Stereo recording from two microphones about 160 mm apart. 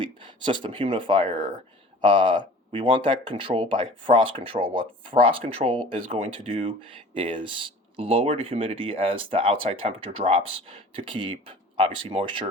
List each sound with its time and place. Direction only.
0.0 s speech: 30° right (ahead or behind)